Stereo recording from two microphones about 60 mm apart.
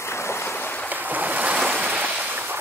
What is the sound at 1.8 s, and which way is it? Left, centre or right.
Waves, right.